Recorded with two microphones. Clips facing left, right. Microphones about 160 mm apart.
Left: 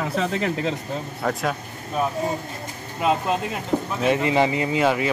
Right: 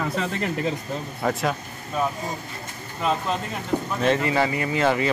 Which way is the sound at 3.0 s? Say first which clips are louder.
Left 3 dB; 10° left (ahead or behind).